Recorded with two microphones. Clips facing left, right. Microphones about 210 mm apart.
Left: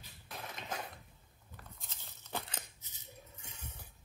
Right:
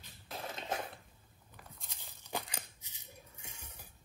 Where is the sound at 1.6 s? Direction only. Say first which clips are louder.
Right 1 dB; 10° right (ahead or behind).